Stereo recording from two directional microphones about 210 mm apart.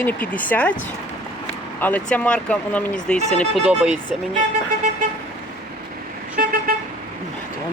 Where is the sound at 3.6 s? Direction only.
5° right (ahead or behind).